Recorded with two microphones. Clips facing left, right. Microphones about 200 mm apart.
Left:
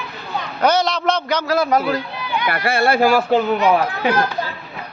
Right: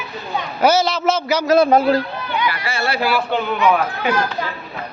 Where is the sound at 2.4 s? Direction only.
55° left (ahead or behind).